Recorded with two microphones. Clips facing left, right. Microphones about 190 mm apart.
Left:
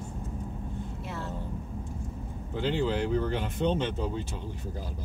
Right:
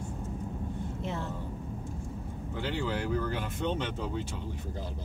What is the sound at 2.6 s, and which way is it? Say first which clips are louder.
Speech: left 5 dB; 20° left (ahead or behind).